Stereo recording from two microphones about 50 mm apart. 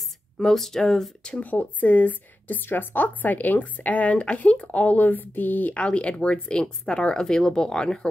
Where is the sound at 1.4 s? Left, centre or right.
Left.